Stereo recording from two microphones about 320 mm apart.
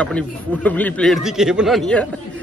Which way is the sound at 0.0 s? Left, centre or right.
Centre.